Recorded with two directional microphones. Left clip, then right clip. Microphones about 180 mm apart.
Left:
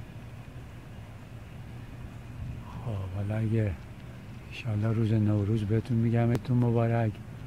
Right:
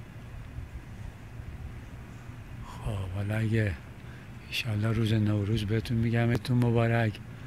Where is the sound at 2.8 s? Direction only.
10° right (ahead or behind).